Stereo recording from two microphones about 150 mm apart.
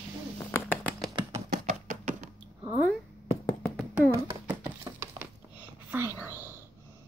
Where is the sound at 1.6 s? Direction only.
55° right (ahead or behind).